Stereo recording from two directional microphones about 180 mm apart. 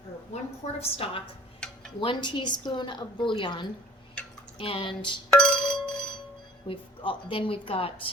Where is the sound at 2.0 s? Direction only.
25° left (ahead or behind).